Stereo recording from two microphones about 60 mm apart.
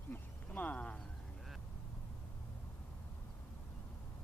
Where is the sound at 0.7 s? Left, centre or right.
Centre.